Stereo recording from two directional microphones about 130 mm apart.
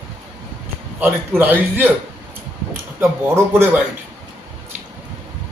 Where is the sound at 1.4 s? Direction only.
15° right (ahead or behind).